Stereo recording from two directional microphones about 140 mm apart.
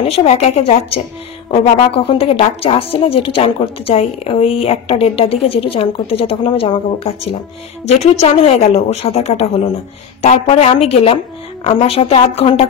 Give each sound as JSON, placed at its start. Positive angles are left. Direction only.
{"t": 0.0, "sound": "speech", "side_deg": 50}